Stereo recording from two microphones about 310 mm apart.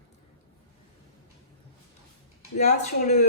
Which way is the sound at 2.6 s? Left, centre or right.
Left.